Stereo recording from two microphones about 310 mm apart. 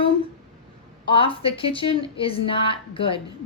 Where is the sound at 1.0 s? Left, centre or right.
Centre.